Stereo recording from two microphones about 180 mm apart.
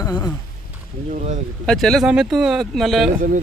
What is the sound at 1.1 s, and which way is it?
Speech, 40° right (ahead or behind).